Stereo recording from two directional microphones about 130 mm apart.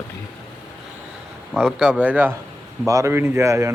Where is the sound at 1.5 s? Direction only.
5° right (ahead or behind).